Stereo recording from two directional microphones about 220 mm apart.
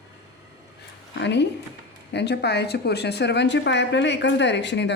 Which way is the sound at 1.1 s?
50° left (ahead or behind).